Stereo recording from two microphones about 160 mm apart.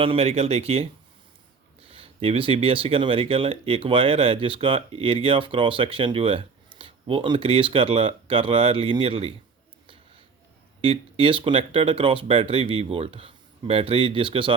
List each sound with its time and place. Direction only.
0.0 s speech: 35° right (ahead or behind)
1.9 s speech: 35° right (ahead or behind)
10.8 s speech: 35° right (ahead or behind)